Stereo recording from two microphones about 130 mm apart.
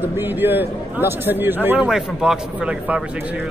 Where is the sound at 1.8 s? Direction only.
5° right (ahead or behind).